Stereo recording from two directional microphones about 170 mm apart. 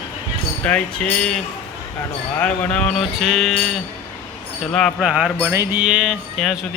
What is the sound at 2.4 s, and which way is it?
Speech, 10° left (ahead or behind).